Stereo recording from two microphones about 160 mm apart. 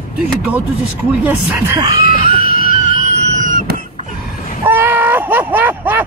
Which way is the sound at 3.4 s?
55° right (ahead or behind).